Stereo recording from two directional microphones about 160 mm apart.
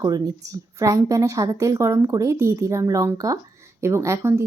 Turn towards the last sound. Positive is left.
turn(degrees=-20)  # may be behind; listen again after turning